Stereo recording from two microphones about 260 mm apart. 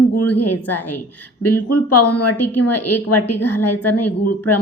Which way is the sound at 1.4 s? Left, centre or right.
Left.